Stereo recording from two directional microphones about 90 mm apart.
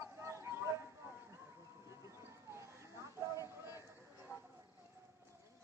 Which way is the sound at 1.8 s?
35° right (ahead or behind).